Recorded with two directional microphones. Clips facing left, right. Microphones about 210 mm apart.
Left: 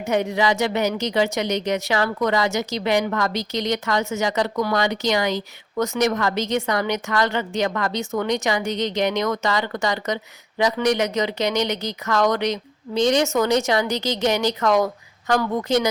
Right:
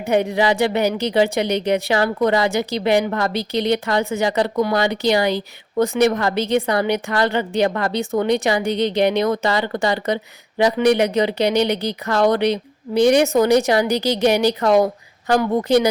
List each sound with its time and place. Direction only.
0.0 s a woman's voice: 30° right (ahead or behind)
12.9 s a woman's voice: 10° right (ahead or behind)
13.6 s a woman's voice: 35° right (ahead or behind)